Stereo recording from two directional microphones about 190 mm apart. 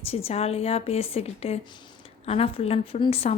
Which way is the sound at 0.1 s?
30° left (ahead or behind).